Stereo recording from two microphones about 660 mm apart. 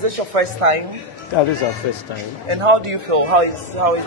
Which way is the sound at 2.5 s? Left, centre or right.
Right.